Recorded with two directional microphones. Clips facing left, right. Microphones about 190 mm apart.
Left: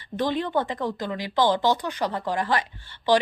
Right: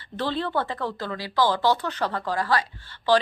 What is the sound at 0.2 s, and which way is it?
A woman's voice, 15° left (ahead or behind).